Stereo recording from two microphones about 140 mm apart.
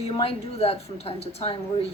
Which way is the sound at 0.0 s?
45° left (ahead or behind).